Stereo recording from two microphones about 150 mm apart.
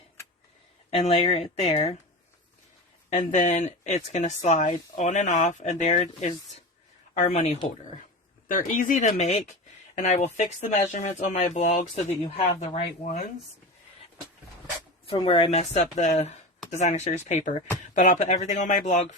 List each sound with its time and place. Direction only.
1.0 s speech: 45° left (ahead or behind)
3.1 s speech: 55° left (ahead or behind)
8.4 s speech: 60° left (ahead or behind)
15.0 s speech: 35° left (ahead or behind); by 19.0 s 55° left (ahead or behind)